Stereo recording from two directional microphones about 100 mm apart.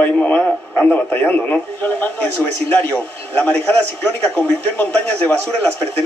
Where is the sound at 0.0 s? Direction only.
15° left (ahead or behind).